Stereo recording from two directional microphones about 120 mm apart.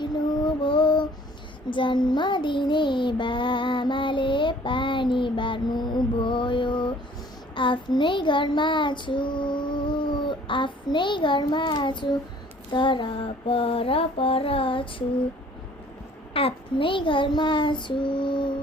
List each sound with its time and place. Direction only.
0.0 s female singing: 40° left (ahead or behind)
1.7 s child singing: 40° left (ahead or behind)
16.3 s child singing: 50° left (ahead or behind)